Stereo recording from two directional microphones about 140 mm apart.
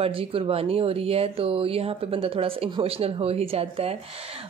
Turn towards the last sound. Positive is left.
turn(degrees=-45)  # may be behind; listen again after turning